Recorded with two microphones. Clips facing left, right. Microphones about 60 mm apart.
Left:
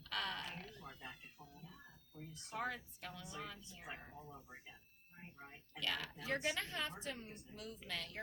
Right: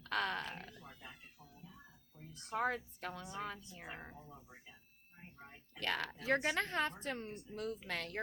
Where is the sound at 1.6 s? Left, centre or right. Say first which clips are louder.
Right 1 dB; centre.